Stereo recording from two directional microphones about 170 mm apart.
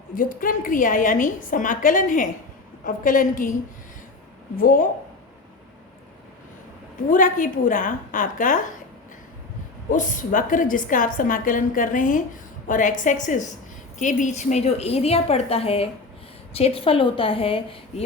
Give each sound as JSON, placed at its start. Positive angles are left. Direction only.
{"t": 0.1, "sound": "a woman's voice", "side_deg": 55}
{"t": 4.5, "sound": "speech", "side_deg": 55}
{"t": 7.1, "sound": "a woman's voice", "side_deg": 50}
{"t": 9.9, "sound": "a woman's voice", "side_deg": 50}